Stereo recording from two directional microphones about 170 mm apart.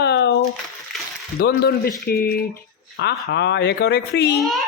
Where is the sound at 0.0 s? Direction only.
75° left (ahead or behind).